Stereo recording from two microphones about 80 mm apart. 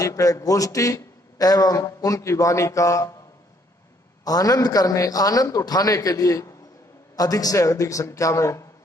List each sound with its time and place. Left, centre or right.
0.0 s a man's voice: left
4.2 s a man's voice: left